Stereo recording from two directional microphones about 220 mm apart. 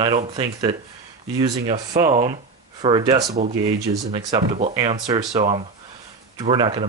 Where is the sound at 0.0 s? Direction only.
25° right (ahead or behind).